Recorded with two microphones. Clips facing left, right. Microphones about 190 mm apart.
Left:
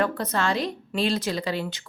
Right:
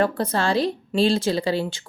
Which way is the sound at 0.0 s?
30° right (ahead or behind).